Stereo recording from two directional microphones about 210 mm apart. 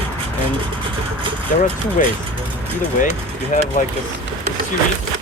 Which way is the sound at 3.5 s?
40° left (ahead or behind).